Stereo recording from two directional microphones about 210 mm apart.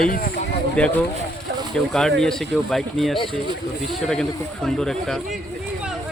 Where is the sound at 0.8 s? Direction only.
5° left (ahead or behind).